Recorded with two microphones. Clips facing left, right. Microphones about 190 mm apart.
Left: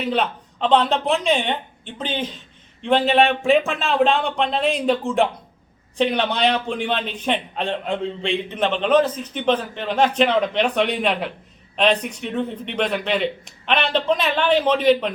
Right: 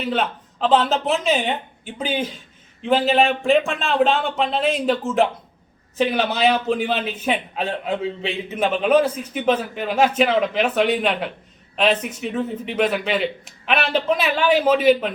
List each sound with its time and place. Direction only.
0.0 s a man's voice: centre (ahead or behind)